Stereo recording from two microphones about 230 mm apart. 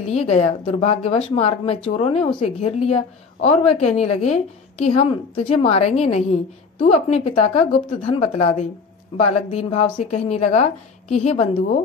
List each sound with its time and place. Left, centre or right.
0.1 s speech: left